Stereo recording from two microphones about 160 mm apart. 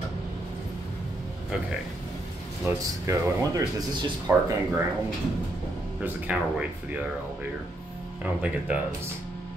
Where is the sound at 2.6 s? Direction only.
15° right (ahead or behind).